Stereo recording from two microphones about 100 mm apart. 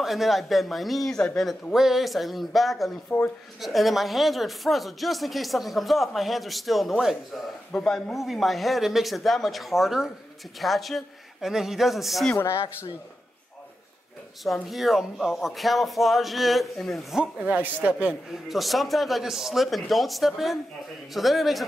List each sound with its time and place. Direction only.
0.0 s speech: centre (ahead or behind)
12.4 s speech: 30° left (ahead or behind)
14.4 s speech: centre (ahead or behind)
17.2 s a man's voice: 10° right (ahead or behind)
18.3 s speech: centre (ahead or behind)